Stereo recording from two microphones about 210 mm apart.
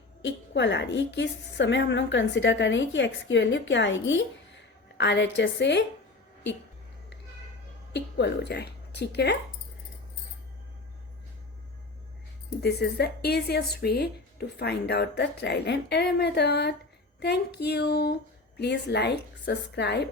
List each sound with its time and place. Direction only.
0.2 s a woman's voice: 55° left (ahead or behind)
7.9 s speech: 55° left (ahead or behind)
12.6 s speech: 50° left (ahead or behind)